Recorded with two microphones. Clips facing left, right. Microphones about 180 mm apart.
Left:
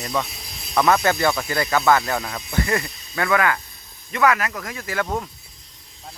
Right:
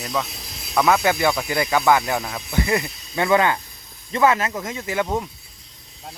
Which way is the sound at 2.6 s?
15° right (ahead or behind).